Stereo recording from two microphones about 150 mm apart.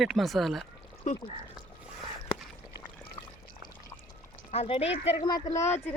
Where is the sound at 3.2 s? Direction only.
35° left (ahead or behind).